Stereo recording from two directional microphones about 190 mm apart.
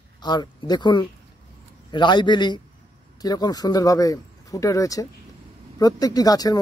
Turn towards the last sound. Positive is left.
turn(degrees=20)  # may be behind; listen again after turning